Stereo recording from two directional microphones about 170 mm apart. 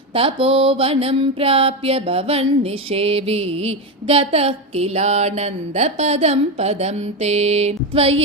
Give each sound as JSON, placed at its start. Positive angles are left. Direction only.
{"t": 0.1, "sound": "mantra", "side_deg": -35}